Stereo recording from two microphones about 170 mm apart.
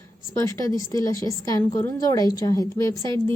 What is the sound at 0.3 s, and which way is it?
A woman's voice, 20° left (ahead or behind).